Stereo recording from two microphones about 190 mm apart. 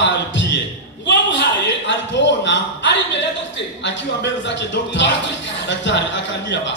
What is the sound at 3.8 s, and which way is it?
Speech, 70° left (ahead or behind).